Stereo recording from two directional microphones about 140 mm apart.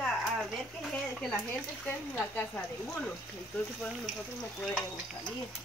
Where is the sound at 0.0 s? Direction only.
5° left (ahead or behind).